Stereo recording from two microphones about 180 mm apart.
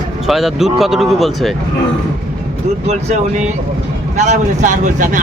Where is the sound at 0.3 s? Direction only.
Centre (ahead or behind).